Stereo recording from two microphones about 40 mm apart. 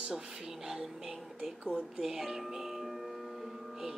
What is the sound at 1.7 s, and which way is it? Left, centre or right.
Music, centre.